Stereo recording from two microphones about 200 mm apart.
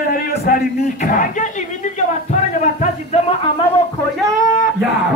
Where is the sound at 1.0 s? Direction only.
40° left (ahead or behind).